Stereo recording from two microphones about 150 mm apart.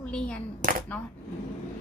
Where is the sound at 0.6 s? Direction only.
60° right (ahead or behind).